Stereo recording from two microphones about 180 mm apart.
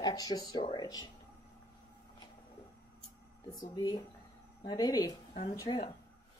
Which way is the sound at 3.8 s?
20° left (ahead or behind).